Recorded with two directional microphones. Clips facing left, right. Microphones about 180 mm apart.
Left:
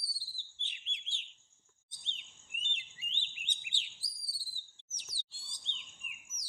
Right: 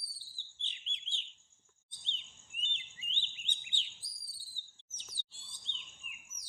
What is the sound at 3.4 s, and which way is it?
Chirp, 80° left.